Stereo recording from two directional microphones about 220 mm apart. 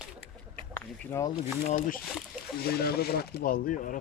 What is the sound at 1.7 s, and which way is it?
Speech, 35° left (ahead or behind).